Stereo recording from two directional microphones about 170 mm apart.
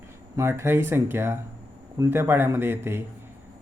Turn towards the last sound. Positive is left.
turn(degrees=-15)  # may be behind; listen again after turning